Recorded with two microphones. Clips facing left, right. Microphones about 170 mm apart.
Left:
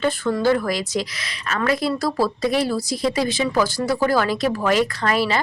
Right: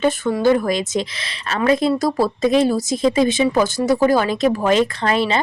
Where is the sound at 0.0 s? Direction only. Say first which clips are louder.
Right 3 dB; 15° right (ahead or behind).